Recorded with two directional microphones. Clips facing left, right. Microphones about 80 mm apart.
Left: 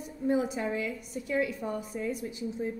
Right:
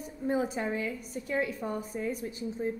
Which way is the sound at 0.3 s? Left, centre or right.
Right.